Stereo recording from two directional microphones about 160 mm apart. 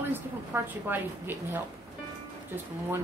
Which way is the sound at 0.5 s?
15° right (ahead or behind).